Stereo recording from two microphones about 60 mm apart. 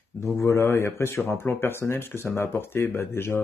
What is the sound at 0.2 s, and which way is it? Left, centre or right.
Speech, left.